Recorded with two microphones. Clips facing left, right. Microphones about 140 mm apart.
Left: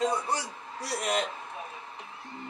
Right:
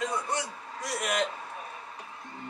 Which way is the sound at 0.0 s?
30° left (ahead or behind).